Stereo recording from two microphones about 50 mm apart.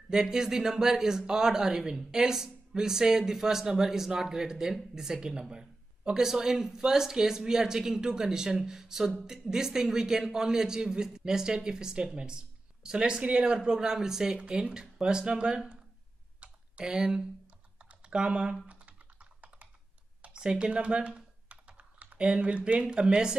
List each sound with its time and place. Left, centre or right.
0.1 s speech: centre
16.3 s typing: centre
17.7 s computer keyboard: right
18.7 s typing: right
20.2 s computer keyboard: right